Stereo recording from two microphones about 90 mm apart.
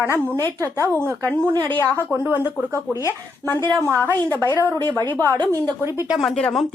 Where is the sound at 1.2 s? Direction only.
20° left (ahead or behind).